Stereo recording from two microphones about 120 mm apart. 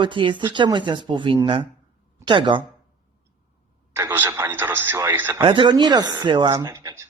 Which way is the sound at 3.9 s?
20° right (ahead or behind).